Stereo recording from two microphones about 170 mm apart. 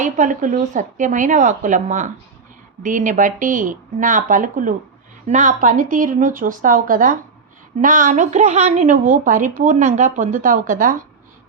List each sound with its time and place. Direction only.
0.0 s a woman's voice: 50° right (ahead or behind)